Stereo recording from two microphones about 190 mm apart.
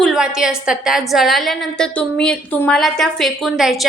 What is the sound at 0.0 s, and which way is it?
A woman's voice, centre (ahead or behind).